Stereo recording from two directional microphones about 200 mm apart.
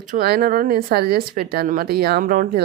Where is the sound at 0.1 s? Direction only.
50° right (ahead or behind).